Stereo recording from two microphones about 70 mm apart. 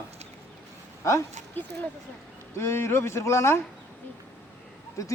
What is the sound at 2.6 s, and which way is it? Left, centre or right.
Speech, left.